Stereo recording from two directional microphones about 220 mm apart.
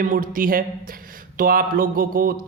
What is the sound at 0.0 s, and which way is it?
A man's voice, 40° right (ahead or behind).